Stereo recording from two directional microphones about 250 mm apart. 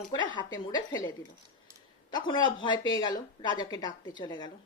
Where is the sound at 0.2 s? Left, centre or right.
Centre.